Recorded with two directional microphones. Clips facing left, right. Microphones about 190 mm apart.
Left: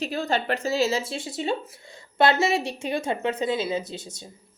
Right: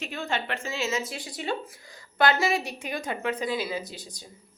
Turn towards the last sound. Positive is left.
turn(degrees=25)  # may be behind; listen again after turning